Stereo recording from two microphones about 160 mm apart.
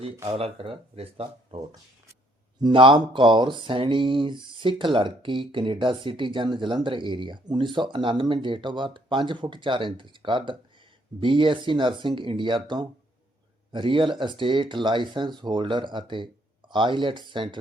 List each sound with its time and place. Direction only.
0.3 s speech: 40° right (ahead or behind)
2.6 s speech: 30° right (ahead or behind)